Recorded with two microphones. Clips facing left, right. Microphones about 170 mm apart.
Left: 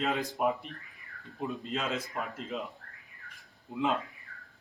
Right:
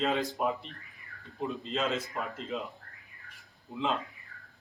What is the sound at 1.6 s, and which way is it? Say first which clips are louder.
Speech: right 4 dB; 5° left (ahead or behind).